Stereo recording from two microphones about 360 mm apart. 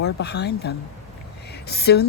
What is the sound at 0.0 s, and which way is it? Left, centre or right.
Speech, left.